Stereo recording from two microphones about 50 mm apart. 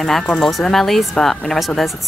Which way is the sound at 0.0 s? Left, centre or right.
Centre.